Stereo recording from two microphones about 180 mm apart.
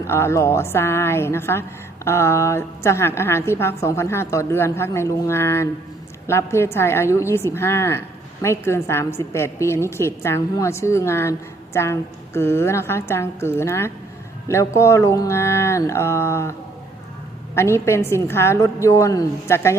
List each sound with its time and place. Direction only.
0.0 s a woman's voice: 15° left (ahead or behind)